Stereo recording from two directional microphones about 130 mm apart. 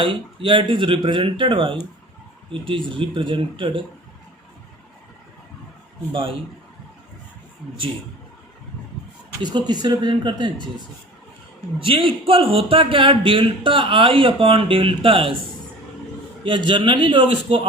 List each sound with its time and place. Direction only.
0.0 s speech: 40° right (ahead or behind)
6.1 s a man's voice: 45° right (ahead or behind)
9.4 s speech: 35° right (ahead or behind)
11.8 s a man's voice: 40° right (ahead or behind)
16.4 s speech: 40° right (ahead or behind)